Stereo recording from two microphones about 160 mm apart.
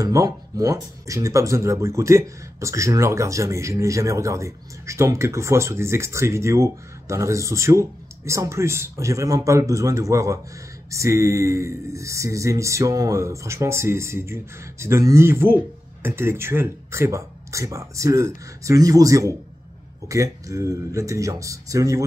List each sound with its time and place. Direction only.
0.0 s speech: 20° right (ahead or behind)